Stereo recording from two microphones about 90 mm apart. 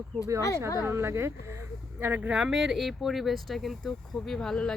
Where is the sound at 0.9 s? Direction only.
30° right (ahead or behind).